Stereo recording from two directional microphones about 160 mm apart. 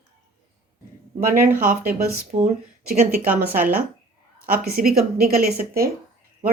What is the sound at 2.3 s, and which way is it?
Speech, 45° right (ahead or behind).